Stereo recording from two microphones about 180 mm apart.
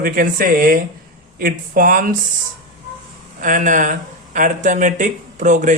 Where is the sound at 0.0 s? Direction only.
50° right (ahead or behind).